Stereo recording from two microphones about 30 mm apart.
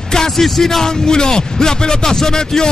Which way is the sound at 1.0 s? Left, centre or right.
Left.